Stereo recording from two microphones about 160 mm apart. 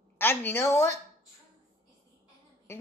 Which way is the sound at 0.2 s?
15° left (ahead or behind).